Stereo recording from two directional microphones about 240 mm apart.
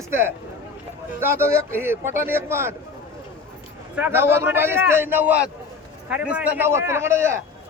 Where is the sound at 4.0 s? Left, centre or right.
Centre.